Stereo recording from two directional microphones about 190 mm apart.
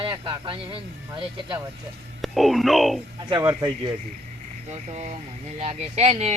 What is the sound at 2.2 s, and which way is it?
Speech, centre (ahead or behind).